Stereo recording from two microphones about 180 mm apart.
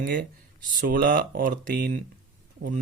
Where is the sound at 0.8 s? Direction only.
50° right (ahead or behind).